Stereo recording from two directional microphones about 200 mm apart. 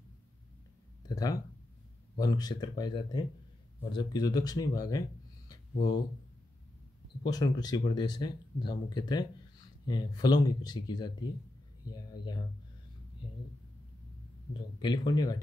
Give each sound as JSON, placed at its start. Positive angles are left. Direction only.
{"t": 1.0, "sound": "speech", "side_deg": 20}
{"t": 5.5, "sound": "a sound", "side_deg": 20}
{"t": 7.2, "sound": "speech", "side_deg": 20}
{"t": 14.5, "sound": "speech", "side_deg": 20}